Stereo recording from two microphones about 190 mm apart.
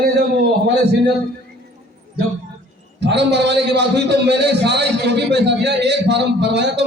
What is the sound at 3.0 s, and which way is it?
A man's voice, 65° right (ahead or behind).